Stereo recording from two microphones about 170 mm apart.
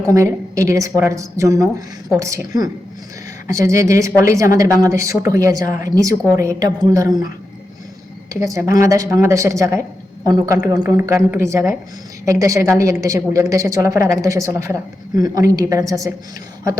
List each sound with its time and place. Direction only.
0.1 s a woman's voice: 20° right (ahead or behind)
8.3 s a woman's voice: 20° right (ahead or behind)